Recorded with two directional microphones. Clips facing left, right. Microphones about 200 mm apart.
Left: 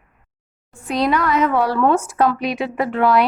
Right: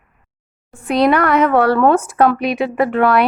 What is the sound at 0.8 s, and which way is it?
A woman's voice, 65° right (ahead or behind).